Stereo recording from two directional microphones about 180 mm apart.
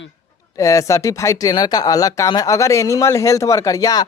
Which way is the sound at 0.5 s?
15° left (ahead or behind).